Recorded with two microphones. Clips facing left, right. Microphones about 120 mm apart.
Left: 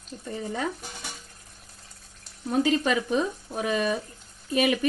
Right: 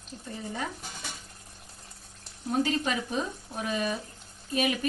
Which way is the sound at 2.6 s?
90° left.